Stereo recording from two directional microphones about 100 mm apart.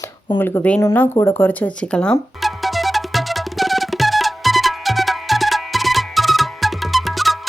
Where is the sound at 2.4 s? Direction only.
Centre (ahead or behind).